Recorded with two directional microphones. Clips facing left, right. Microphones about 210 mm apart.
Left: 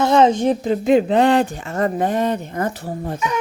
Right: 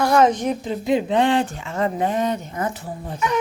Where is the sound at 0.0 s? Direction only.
25° left (ahead or behind).